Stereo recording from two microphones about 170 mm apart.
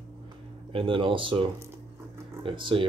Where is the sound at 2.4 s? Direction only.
30° right (ahead or behind).